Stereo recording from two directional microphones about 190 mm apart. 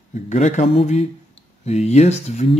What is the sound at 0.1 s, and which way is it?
Speech, 40° left (ahead or behind).